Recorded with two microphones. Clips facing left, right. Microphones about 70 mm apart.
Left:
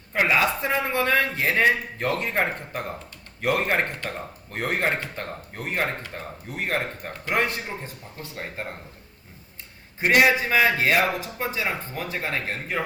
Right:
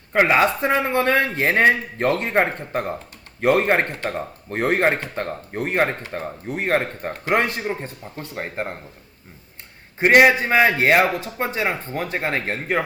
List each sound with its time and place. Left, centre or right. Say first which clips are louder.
0.1 s a man's voice: right 5 dB; right
10.0 s speech: right 5 dB; right